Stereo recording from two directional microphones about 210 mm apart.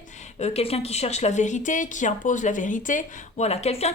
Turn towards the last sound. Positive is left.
turn(degrees=30)  # may be behind; listen again after turning